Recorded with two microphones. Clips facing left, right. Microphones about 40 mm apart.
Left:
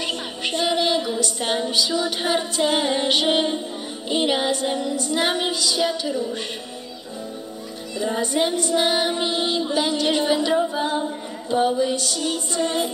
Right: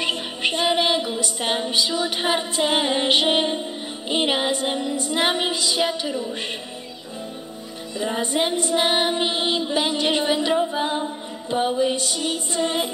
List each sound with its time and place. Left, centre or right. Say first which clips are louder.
0.0 s music: right 3 dB; right
8.0 s music: left 1 dB; right